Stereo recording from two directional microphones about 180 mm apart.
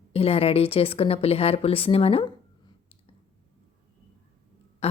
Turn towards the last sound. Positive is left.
turn(degrees=35)  # may be behind; listen again after turning